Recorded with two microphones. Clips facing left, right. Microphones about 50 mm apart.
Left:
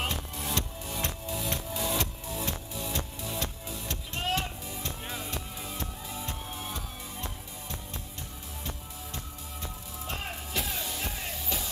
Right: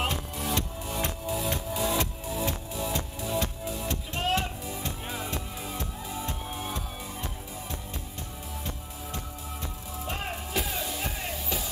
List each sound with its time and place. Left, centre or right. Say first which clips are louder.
0.0 s music: right 3 dB; centre
10.0 s music: right 3 dB; centre